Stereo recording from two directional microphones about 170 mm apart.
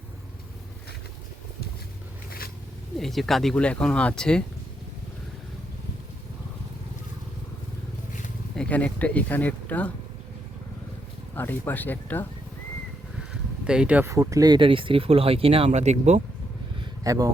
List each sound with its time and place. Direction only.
3.0 s speech: centre (ahead or behind)
8.5 s speech: 5° left (ahead or behind)
11.3 s speech: 10° left (ahead or behind)
13.3 s a sound: 5° right (ahead or behind)
14.1 s speech: 20° right (ahead or behind); by 16.2 s 40° right (ahead or behind)
17.0 s speech: 20° right (ahead or behind)